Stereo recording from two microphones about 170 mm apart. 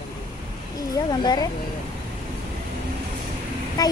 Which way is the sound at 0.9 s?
25° left (ahead or behind).